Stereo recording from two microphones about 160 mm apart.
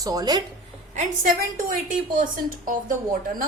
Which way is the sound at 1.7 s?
55° right (ahead or behind).